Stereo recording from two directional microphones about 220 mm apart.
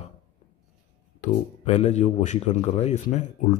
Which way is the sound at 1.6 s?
30° left (ahead or behind).